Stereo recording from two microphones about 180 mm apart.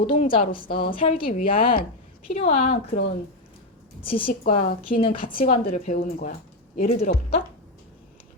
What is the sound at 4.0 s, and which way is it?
A woman's voice, 30° left (ahead or behind).